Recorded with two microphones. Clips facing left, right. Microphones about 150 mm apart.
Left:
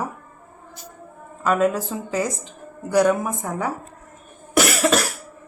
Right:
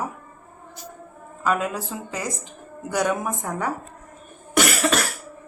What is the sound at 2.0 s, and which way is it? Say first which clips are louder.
Speech: left 6 dB; centre (ahead or behind).